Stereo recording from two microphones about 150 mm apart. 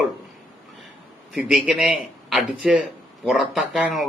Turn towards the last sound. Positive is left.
turn(degrees=-5)  # may be behind; listen again after turning